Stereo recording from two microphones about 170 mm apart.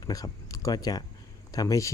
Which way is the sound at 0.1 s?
20° left (ahead or behind).